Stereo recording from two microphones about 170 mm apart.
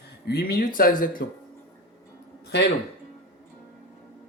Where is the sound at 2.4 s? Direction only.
90° left.